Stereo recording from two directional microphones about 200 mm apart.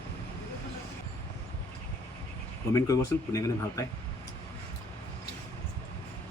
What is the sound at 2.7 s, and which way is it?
Speech, 15° left (ahead or behind).